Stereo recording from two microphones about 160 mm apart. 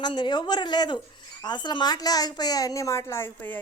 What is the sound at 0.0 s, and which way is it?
Speech, 30° left (ahead or behind).